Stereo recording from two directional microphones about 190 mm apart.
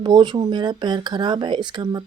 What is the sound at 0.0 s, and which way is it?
Speech, 25° right (ahead or behind).